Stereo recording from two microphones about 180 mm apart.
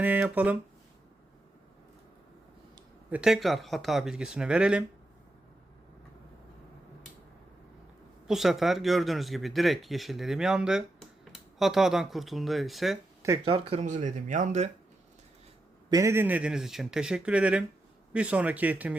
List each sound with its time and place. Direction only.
0.0 s speech: 10° right (ahead or behind)
3.1 s speech: 5° right (ahead or behind)
8.3 s speech: centre (ahead or behind)
13.2 s speech: 20° right (ahead or behind)
13.5 s speech: 30° right (ahead or behind)
13.8 s speech: 45° right (ahead or behind)
15.9 s speech: 15° right (ahead or behind)